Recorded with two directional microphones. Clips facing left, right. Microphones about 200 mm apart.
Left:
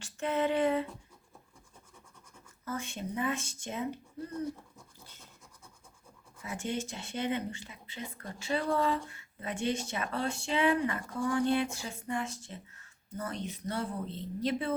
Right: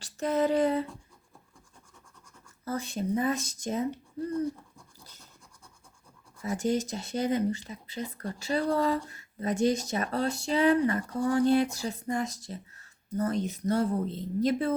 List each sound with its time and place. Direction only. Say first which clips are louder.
0.0 s a sound: right 4 dB; 40° right (ahead or behind)
2.6 s speech: right 6 dB; 35° right (ahead or behind)
6.4 s speech: right 8 dB; 40° right (ahead or behind)